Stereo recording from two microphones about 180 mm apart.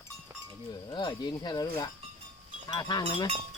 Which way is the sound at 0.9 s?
25° left (ahead or behind).